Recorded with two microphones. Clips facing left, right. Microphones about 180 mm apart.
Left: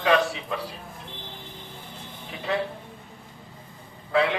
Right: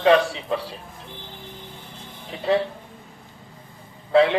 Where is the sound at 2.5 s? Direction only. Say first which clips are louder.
Right 6 dB; 30° right (ahead or behind).